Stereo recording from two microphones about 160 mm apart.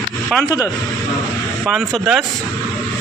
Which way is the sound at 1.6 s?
Centre (ahead or behind).